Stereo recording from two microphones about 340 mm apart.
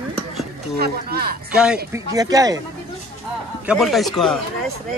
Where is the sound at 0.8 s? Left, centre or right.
Right.